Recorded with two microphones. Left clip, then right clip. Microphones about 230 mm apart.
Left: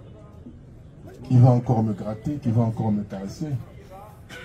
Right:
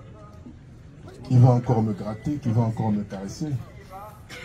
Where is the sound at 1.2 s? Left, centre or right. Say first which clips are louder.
Left 1 dB; left.